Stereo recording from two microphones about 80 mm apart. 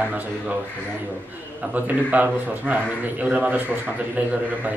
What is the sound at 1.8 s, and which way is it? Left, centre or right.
A man's voice, right.